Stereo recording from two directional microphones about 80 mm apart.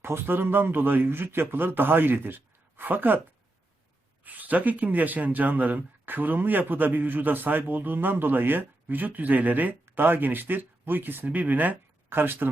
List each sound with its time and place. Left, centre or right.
0.0 s speech: right
4.2 s speech: centre